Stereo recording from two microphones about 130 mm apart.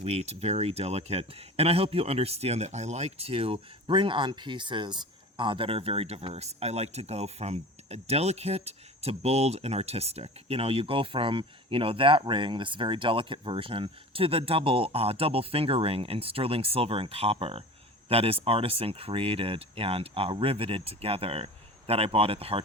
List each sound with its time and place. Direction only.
0.0 s speech: 55° right (ahead or behind)